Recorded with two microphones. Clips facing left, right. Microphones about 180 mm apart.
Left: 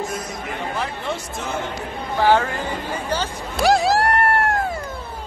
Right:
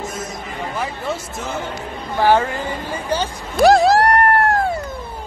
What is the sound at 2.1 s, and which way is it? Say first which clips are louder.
Speech: right 2 dB; 15° right (ahead or behind).